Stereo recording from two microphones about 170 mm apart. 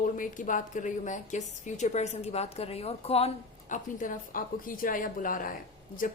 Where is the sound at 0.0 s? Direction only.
50° left (ahead or behind).